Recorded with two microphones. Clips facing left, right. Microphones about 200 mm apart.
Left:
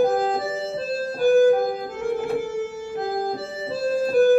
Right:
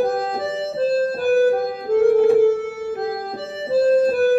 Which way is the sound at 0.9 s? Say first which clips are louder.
Left 1 dB; 55° right (ahead or behind).